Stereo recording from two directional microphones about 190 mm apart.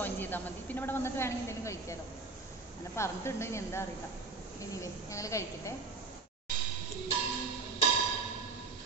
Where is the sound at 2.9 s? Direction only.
15° left (ahead or behind).